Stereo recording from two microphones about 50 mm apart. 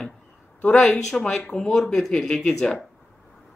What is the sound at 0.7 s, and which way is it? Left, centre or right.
Speech, centre.